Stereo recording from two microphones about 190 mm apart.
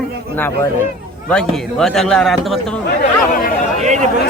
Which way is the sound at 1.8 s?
Centre (ahead or behind).